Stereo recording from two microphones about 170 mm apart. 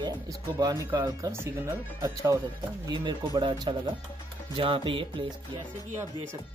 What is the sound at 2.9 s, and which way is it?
Speech, 25° right (ahead or behind).